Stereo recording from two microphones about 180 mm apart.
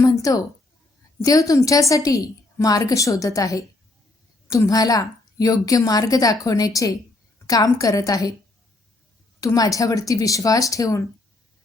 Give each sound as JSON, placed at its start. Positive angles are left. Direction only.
{"t": 0.0, "sound": "a sound", "side_deg": 20}
{"t": 1.2, "sound": "a woman's voice", "side_deg": 20}
{"t": 9.4, "sound": "a woman's voice", "side_deg": 20}